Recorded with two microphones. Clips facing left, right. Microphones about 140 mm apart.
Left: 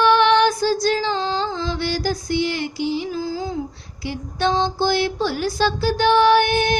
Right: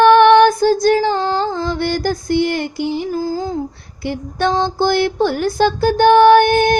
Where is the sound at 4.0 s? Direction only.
55° right (ahead or behind).